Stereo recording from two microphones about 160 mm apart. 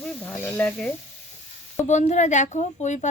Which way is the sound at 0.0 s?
10° left (ahead or behind).